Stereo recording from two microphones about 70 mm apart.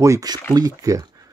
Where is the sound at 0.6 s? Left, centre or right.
Right.